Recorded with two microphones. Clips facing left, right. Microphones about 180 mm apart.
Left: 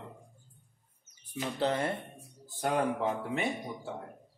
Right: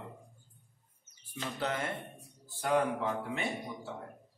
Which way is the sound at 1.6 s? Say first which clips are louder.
Left 5 dB; 30° left (ahead or behind).